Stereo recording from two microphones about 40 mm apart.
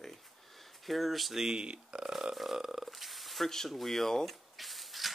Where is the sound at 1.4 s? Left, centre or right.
Centre.